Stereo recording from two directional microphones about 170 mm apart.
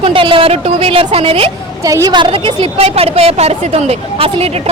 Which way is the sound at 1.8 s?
20° right (ahead or behind).